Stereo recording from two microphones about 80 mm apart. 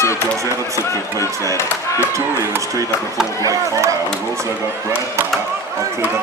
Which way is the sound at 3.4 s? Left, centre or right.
Right.